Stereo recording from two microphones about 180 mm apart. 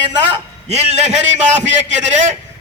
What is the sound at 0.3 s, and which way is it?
A man's voice, 35° right (ahead or behind).